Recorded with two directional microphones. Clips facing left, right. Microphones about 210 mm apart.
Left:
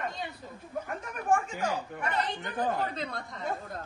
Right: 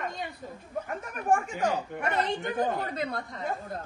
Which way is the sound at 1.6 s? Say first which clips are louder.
Right 3 dB; 50° right (ahead or behind).